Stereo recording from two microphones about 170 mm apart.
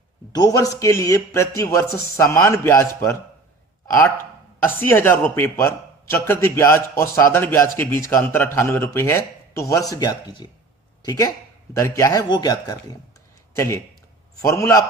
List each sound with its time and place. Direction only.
0.3 s a man's voice: 20° left (ahead or behind)